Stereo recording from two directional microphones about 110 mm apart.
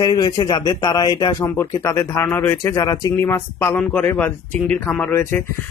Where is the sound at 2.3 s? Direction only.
15° left (ahead or behind).